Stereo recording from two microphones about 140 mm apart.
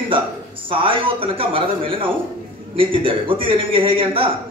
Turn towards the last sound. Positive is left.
turn(degrees=-40)  # may be behind; listen again after turning